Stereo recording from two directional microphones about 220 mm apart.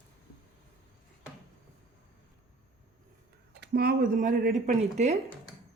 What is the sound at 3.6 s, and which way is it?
Speech, 45° right (ahead or behind).